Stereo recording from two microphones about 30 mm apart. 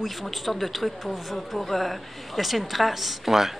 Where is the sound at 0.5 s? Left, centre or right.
Centre.